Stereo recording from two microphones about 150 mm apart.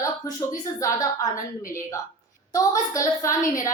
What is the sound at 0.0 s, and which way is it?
A woman's voice, 20° left (ahead or behind).